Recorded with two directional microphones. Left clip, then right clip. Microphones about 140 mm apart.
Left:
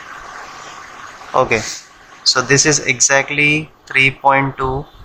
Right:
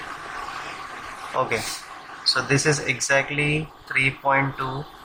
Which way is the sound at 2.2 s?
55° left (ahead or behind).